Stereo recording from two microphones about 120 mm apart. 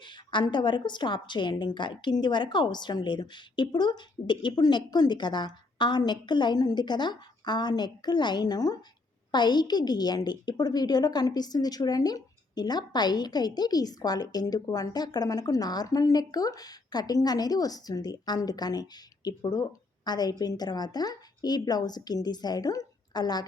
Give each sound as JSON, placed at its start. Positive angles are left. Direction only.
{"t": 0.0, "sound": "a woman's voice", "side_deg": 40}